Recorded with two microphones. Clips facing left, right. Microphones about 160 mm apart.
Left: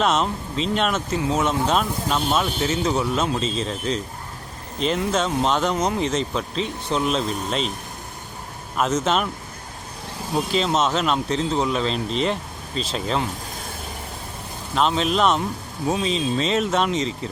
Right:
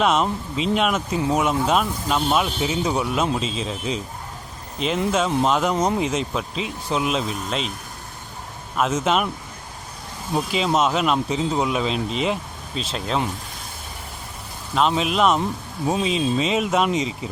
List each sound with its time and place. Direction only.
0.0 s speech: centre (ahead or behind)
1.1 s speech: 15° right (ahead or behind)
1.6 s speech: 5° right (ahead or behind)
8.7 s speech: centre (ahead or behind)
10.3 s speech: 5° right (ahead or behind)
14.8 s speech: 5° right (ahead or behind)